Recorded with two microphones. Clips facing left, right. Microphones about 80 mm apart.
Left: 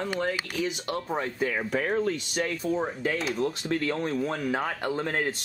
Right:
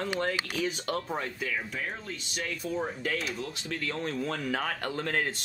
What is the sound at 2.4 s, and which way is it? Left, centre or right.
Speech, left.